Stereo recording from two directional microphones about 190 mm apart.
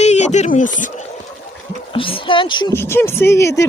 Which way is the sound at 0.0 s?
35° left (ahead or behind).